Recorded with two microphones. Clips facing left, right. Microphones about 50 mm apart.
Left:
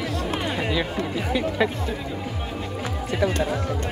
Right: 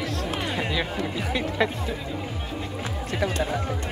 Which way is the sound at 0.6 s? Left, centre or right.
Centre.